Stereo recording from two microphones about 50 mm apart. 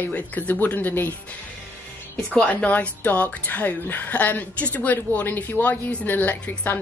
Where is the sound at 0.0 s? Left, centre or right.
Left.